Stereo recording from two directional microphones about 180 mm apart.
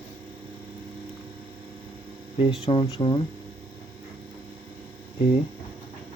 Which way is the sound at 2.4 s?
30° left (ahead or behind).